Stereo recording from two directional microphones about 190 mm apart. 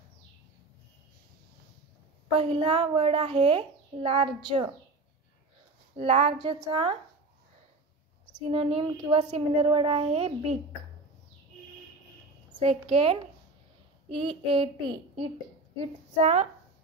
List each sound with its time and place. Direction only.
2.3 s a child's voice: 30° right (ahead or behind)
5.9 s a child's voice: 35° right (ahead or behind)
8.5 s a child's voice: 30° right (ahead or behind)
12.4 s a woman's voice: 25° right (ahead or behind)